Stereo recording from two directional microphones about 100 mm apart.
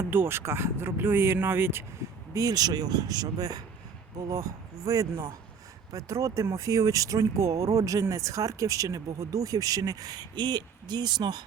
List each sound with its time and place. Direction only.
0.0 s speech: 20° right (ahead or behind); by 11.4 s 45° right (ahead or behind)